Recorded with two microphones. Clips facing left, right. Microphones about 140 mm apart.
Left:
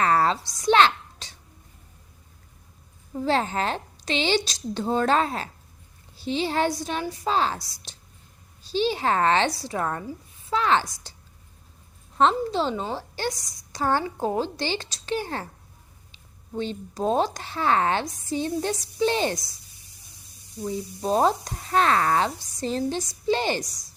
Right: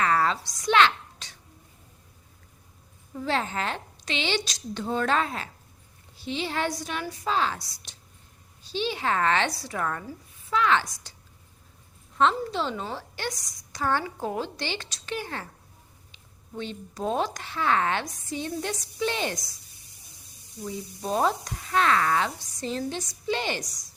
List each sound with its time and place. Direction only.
0.0 s a sound: 35° left (ahead or behind)
3.2 s a woman's voice: 35° left (ahead or behind)
12.1 s a woman's voice: 35° left (ahead or behind)
20.6 s a woman's voice: 30° left (ahead or behind)